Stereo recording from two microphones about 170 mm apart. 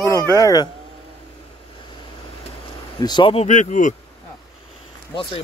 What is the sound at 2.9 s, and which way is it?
Speech, 25° left (ahead or behind).